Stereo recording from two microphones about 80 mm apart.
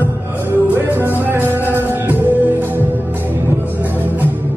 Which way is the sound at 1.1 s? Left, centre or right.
Right.